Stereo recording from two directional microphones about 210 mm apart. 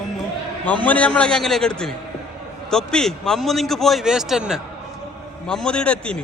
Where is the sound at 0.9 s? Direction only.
5° left (ahead or behind).